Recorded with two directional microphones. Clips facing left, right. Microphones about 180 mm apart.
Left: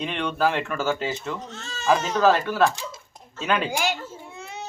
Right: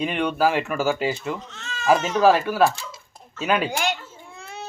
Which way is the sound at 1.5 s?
35° left (ahead or behind).